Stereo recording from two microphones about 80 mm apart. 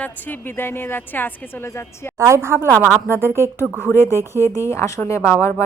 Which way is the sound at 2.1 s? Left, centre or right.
Right.